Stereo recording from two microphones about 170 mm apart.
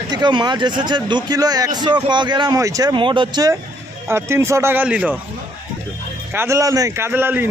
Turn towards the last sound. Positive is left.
turn(degrees=-10)  # may be behind; listen again after turning